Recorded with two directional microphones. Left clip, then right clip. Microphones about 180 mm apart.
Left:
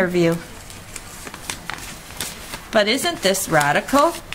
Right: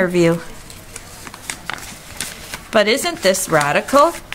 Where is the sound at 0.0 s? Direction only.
25° right (ahead or behind).